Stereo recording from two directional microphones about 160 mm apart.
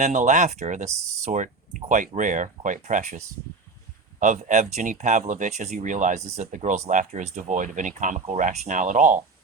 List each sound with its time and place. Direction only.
0.0 s speech: 50° right (ahead or behind)